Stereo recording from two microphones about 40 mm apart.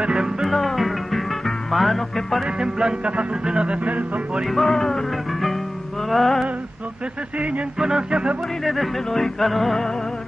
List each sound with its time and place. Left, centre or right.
0.0 s music: centre
0.5 s music: centre
2.4 s music: centre; by 4.2 s right
4.5 s music: centre
6.0 s music: centre
7.3 s a sound: right
7.9 s music: right
8.6 s music: centre